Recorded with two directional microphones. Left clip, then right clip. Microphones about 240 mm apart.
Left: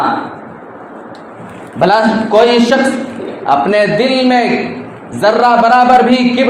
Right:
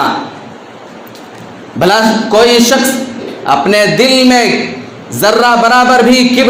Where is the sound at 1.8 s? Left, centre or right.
Right.